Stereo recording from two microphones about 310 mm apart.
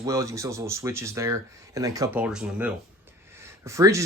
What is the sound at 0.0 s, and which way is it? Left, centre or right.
Speech, centre.